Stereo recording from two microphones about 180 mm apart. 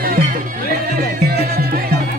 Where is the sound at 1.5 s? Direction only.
55° right (ahead or behind).